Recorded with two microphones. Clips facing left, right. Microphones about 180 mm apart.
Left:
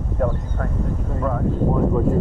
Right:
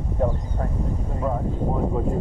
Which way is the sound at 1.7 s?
65° left (ahead or behind).